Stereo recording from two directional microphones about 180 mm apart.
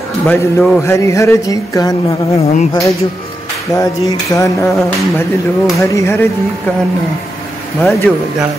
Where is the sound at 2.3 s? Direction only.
35° left (ahead or behind).